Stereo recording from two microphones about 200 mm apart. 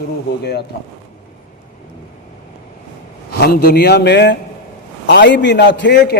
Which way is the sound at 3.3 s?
50° left (ahead or behind).